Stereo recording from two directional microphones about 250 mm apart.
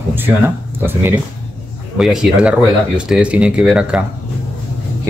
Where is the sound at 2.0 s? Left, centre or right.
Centre.